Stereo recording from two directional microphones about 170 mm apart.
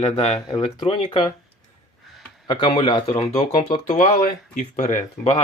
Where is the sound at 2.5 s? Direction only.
25° left (ahead or behind); by 5.3 s 45° left (ahead or behind).